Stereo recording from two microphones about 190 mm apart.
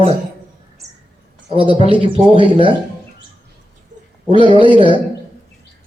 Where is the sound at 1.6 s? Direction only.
25° left (ahead or behind).